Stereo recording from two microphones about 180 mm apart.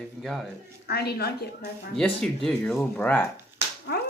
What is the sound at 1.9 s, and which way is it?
Speech, 5° left (ahead or behind).